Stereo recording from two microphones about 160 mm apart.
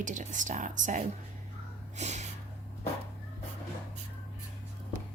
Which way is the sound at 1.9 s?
45° right (ahead or behind).